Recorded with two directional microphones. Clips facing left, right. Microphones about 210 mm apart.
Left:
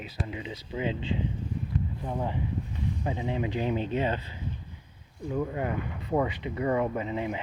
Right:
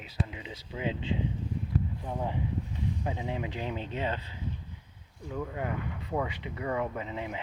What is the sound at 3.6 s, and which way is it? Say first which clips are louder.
Speech: left 6 dB; 10° left (ahead or behind).